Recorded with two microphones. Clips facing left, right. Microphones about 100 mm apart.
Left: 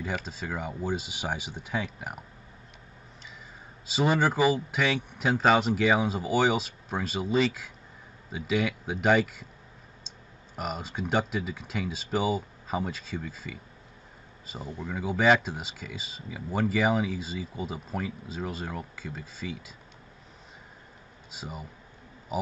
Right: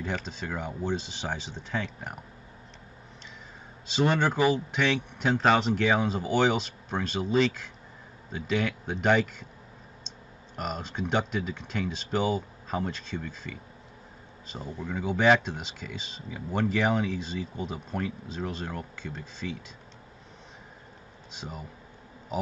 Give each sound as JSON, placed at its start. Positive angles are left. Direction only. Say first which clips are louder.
{"t": 0.0, "sound": "speech", "louder": "even", "side_deg": 5}
{"t": 3.8, "sound": "speech", "louder": "even", "side_deg": 5}
{"t": 21.3, "sound": "a man's voice", "louder": "even", "side_deg": 5}